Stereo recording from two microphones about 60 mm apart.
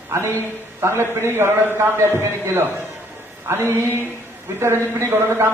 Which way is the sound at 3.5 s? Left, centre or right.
Right.